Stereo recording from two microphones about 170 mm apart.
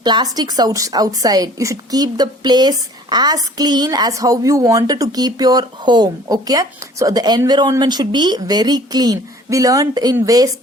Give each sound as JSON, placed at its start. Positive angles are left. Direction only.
{"t": 0.0, "sound": "a woman's voice", "side_deg": -25}